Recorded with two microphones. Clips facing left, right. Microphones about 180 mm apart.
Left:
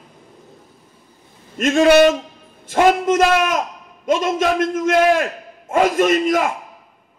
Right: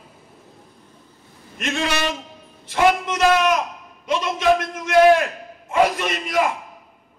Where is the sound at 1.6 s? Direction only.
50° left (ahead or behind).